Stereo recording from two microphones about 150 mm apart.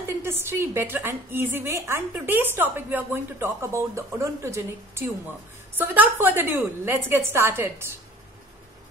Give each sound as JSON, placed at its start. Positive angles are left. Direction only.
{"t": 0.2, "sound": "a woman's voice", "side_deg": -15}